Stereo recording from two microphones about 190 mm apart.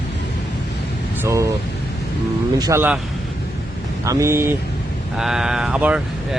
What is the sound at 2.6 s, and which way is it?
Speech, 15° right (ahead or behind).